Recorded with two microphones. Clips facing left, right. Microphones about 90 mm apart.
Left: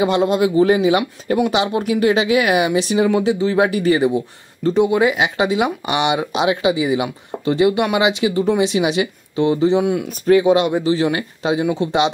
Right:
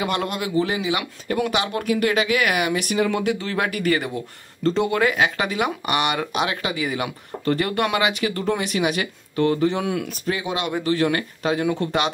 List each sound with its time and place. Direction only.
0.0 s speech: 25° left (ahead or behind)
1.3 s speech: 25° left (ahead or behind)
10.2 s speech: 35° left (ahead or behind); by 12.1 s 20° left (ahead or behind)